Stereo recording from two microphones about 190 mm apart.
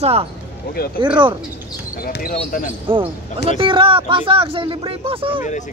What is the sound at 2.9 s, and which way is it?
Speech, 25° right (ahead or behind).